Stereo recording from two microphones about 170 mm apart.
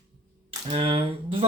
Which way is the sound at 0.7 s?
35° right (ahead or behind).